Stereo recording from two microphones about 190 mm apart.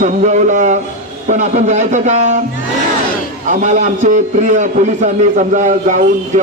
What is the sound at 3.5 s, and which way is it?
A man's voice, 40° right (ahead or behind).